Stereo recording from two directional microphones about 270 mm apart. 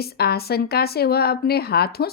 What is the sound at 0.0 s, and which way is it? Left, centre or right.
Speech, left.